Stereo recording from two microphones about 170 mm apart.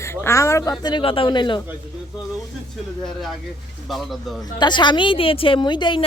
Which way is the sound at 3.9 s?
Centre (ahead or behind).